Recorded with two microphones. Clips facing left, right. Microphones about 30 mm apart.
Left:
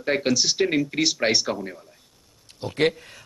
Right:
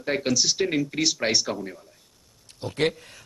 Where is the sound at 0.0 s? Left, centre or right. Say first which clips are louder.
Left 2 dB; centre.